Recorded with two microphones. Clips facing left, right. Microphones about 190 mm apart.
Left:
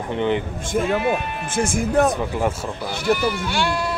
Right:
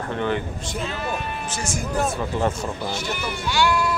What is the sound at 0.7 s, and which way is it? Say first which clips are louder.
Speech: left 9 dB; 55° left (ahead or behind).